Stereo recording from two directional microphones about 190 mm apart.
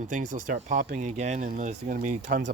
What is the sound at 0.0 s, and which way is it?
Speech, 45° right (ahead or behind).